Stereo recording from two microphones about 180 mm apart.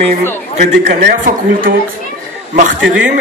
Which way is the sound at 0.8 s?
50° right (ahead or behind).